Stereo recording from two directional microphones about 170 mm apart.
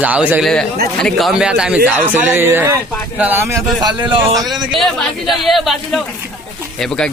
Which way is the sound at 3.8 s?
25° right (ahead or behind).